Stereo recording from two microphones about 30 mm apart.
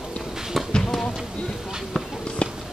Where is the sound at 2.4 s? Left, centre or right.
Left.